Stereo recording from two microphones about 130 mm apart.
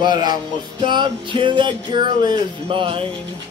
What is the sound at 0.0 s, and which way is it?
Music, 35° right (ahead or behind).